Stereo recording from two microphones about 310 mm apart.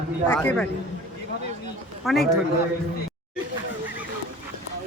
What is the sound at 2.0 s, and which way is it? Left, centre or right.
Speech, centre.